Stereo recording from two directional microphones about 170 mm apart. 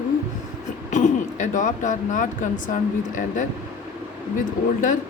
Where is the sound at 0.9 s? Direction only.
45° left (ahead or behind).